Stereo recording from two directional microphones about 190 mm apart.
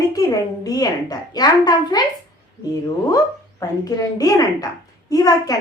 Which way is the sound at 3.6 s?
20° left (ahead or behind).